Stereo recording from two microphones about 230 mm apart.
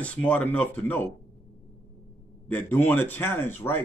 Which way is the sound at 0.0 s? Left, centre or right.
Centre.